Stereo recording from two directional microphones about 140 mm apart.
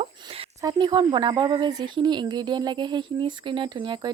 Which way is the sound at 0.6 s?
30° right (ahead or behind).